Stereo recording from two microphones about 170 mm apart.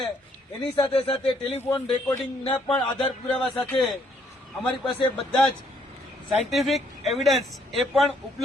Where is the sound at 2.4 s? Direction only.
35° left (ahead or behind).